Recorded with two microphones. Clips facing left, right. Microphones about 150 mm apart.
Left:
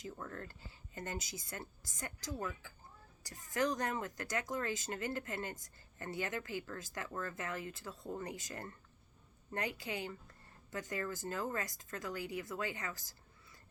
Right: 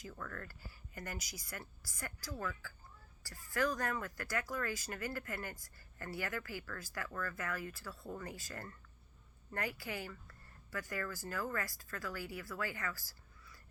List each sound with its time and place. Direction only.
0.0 s a woman's voice: 25° left (ahead or behind)